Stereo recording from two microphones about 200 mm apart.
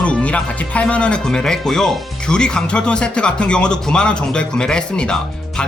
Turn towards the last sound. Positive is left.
turn(degrees=5)  # may be behind; listen again after turning